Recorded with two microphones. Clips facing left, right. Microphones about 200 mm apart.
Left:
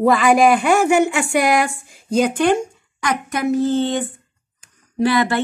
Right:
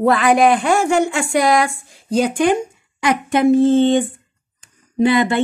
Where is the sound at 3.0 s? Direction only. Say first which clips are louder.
Right 6 dB; 25° right (ahead or behind).